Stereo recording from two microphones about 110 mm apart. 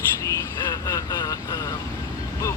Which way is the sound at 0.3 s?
30° left (ahead or behind).